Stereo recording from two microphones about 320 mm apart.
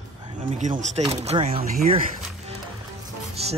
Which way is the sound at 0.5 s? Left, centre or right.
Right.